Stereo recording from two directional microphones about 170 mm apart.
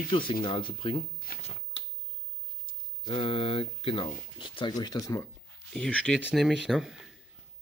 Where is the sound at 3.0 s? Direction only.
30° left (ahead or behind).